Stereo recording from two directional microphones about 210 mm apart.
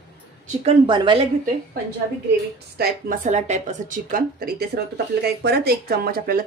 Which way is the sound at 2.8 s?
40° right (ahead or behind).